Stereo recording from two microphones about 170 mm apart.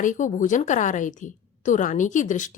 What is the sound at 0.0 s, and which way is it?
A woman's voice, 50° left (ahead or behind).